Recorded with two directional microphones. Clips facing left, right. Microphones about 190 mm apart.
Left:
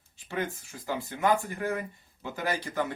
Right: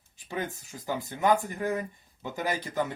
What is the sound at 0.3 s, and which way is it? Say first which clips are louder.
Speech: left 1 dB; 15° right (ahead or behind).